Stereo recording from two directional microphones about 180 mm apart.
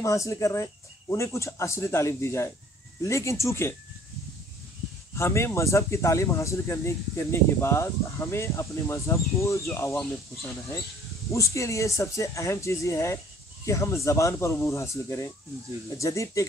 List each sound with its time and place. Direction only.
0.0 s speech: 15° left (ahead or behind)
5.1 s speech: 15° left (ahead or behind)